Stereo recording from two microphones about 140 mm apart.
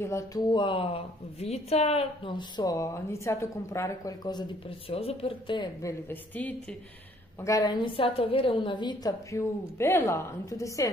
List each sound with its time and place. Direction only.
0.0 s a woman's voice: 25° left (ahead or behind); by 5.7 s 40° left (ahead or behind)
5.8 s a woman's voice: 20° left (ahead or behind)
7.4 s a woman's voice: 25° left (ahead or behind)
7.8 s a woman's voice: 40° left (ahead or behind)
9.3 s a woman's voice: 20° left (ahead or behind)